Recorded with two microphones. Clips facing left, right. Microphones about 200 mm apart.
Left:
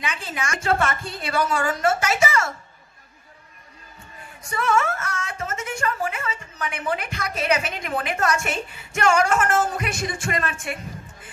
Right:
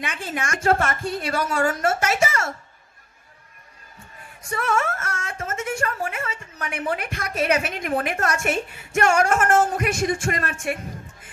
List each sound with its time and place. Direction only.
0.0 s speech: 50° right (ahead or behind)
4.5 s speech: 45° right (ahead or behind)